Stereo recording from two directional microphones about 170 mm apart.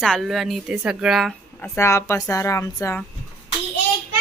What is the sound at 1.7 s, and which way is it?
A woman's voice, 15° left (ahead or behind).